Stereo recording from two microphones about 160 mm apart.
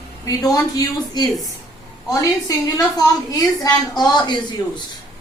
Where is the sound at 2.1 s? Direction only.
20° left (ahead or behind).